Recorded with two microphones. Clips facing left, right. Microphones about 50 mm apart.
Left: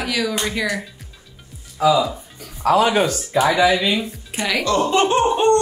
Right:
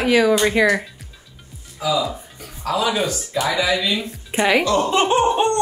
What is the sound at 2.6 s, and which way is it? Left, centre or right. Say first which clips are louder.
Speech: left 5 dB; left.